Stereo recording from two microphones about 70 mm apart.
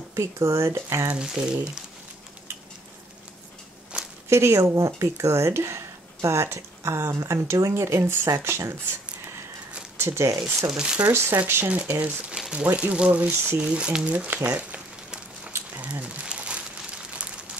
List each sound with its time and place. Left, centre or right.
0.1 s speech: right
1.1 s speech: centre
3.9 s a sound: centre
4.3 s speech: right
7.7 s speech: right
9.9 s speech: right
10.7 s speech: centre
11.0 s speech: right
12.3 s speech: centre
15.8 s crumpling: centre